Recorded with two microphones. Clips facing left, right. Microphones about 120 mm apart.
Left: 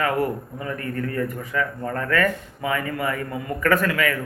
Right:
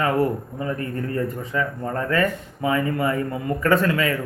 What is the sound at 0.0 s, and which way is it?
Speech, 25° right (ahead or behind).